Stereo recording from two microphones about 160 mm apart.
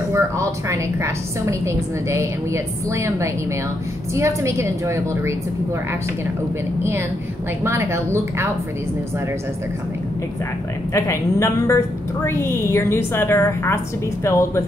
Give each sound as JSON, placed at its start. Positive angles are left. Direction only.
{"t": 0.1, "sound": "a woman's voice", "side_deg": -20}
{"t": 6.8, "sound": "a woman's voice", "side_deg": -15}
{"t": 10.9, "sound": "a woman's voice", "side_deg": 20}